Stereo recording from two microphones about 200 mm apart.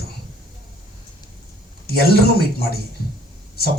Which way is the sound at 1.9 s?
50° left (ahead or behind).